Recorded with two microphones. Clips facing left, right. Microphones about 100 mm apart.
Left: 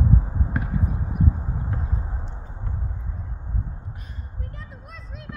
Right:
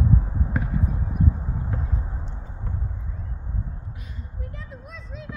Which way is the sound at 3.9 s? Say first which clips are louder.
Even; 40° left (ahead or behind).